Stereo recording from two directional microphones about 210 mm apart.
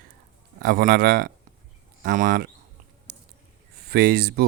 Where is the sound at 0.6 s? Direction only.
45° right (ahead or behind).